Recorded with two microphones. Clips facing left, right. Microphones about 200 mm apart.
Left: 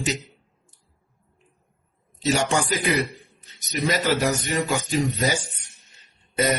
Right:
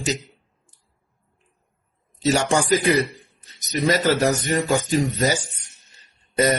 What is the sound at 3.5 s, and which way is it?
A man's voice, 40° right (ahead or behind).